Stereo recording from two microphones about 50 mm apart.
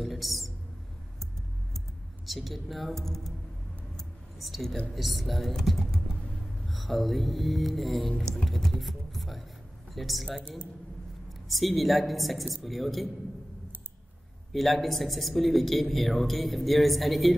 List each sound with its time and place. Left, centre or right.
0.0 s a sound: centre
2.2 s speech: centre
3.9 s a sound: centre
4.9 s speech: centre
8.2 s speech: centre
8.5 s speech: centre
11.4 s speech: centre
14.5 s speech: centre